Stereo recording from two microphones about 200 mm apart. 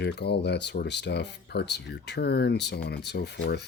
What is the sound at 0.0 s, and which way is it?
Speech, 55° left (ahead or behind).